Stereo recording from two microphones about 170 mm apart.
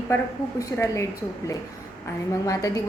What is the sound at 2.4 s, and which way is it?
Speech, 20° left (ahead or behind).